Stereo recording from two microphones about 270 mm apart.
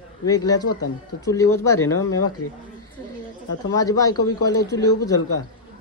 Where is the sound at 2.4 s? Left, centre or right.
Left.